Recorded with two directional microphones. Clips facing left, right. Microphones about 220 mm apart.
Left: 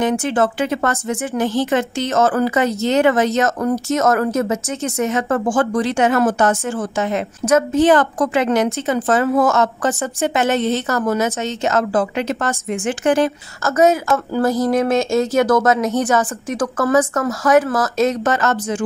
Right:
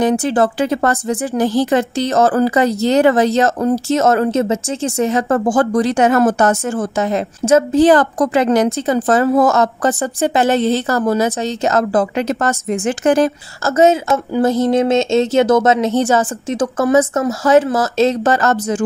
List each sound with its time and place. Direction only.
0.0 s speech: 35° right (ahead or behind)
7.4 s speech: 30° right (ahead or behind)
13.7 s a woman's voice: 25° right (ahead or behind)